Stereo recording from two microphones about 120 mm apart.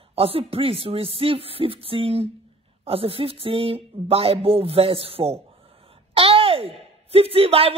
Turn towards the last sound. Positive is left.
turn(degrees=-55)  # may be behind; listen again after turning